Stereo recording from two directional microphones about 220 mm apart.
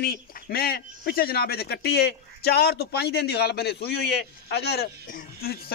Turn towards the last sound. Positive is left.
turn(degrees=45)  # may be behind; listen again after turning